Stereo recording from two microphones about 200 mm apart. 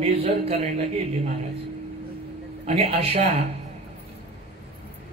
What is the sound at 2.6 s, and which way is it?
Music, 30° right (ahead or behind).